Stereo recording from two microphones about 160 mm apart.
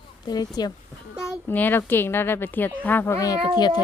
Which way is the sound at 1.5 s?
10° left (ahead or behind).